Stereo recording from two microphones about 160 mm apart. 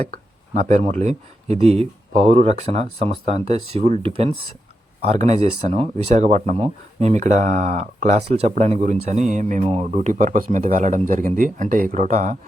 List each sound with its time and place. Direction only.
0.5 s speech: 45° right (ahead or behind)